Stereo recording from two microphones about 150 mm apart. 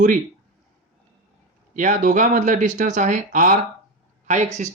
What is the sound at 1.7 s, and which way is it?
Speech, 60° right (ahead or behind).